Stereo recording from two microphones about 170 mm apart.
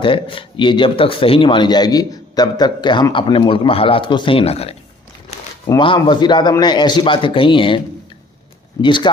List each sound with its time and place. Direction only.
0.0 s speech: 30° left (ahead or behind)
5.6 s speech: 25° left (ahead or behind)
8.8 s speech: 30° left (ahead or behind)